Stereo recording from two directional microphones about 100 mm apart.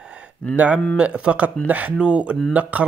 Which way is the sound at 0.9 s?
10° right (ahead or behind).